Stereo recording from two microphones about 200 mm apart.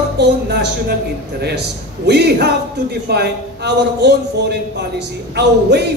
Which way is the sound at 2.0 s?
55° right (ahead or behind).